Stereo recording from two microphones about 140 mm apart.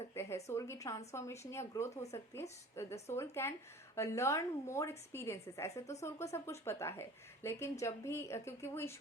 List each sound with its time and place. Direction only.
0.1 s a woman's voice: 20° left (ahead or behind)